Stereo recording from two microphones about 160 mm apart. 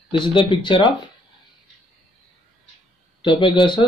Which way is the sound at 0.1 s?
30° left (ahead or behind).